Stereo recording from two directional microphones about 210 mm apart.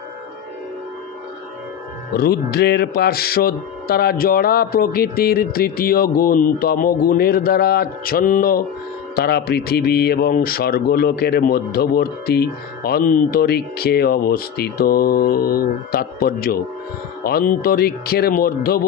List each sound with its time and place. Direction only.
2.1 s speech: 45° left (ahead or behind)